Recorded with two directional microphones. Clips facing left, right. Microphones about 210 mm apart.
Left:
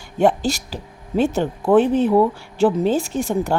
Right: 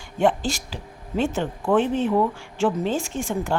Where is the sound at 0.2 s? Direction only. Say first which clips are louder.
Left 4 dB; 40° left (ahead or behind).